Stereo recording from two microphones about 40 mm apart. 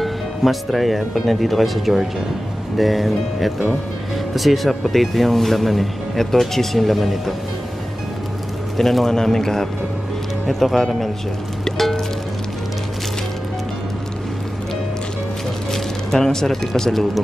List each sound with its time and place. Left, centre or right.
0.0 s speech: centre
8.7 s speech: centre
11.6 s music: centre
15.7 s speech: centre